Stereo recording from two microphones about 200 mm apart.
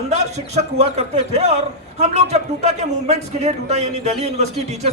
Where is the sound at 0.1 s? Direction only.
35° right (ahead or behind).